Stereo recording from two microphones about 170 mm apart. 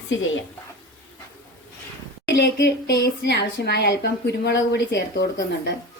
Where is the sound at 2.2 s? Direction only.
85° left.